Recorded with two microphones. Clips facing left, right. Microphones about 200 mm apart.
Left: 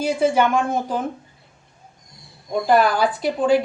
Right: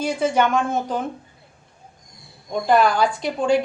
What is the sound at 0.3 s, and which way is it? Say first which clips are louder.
Speech: left 1 dB; 5° left (ahead or behind).